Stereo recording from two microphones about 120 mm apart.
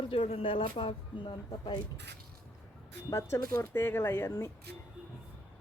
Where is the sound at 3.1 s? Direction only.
25° left (ahead or behind).